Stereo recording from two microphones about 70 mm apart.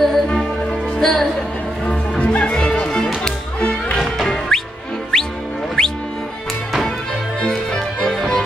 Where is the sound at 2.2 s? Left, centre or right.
Centre.